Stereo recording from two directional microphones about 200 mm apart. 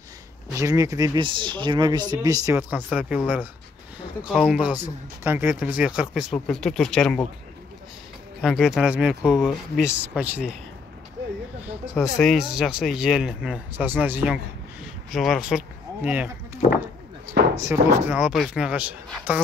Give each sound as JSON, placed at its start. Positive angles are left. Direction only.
{"t": 0.5, "sound": "speech", "side_deg": -15}
{"t": 4.2, "sound": "speech", "side_deg": 0}
{"t": 8.4, "sound": "speech", "side_deg": 0}
{"t": 11.6, "sound": "speech", "side_deg": -5}
{"t": 17.6, "sound": "speech", "side_deg": -15}